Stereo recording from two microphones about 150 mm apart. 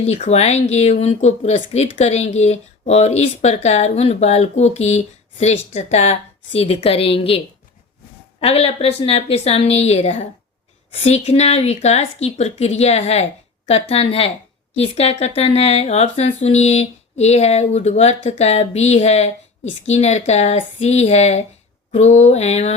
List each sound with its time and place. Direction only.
0.0 s a woman's voice: 45° left (ahead or behind)